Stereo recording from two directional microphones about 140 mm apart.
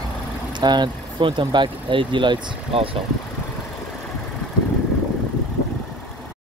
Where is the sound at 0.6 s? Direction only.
30° right (ahead or behind).